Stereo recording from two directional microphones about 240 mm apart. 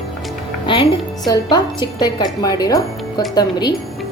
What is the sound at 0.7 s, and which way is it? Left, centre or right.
A woman's voice, centre.